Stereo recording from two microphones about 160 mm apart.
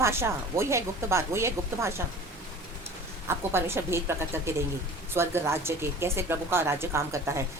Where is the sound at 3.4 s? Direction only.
15° right (ahead or behind).